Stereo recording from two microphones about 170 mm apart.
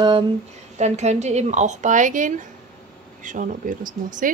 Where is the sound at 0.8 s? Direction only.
40° right (ahead or behind).